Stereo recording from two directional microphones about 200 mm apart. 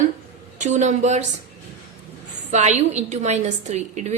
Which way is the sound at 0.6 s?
35° right (ahead or behind).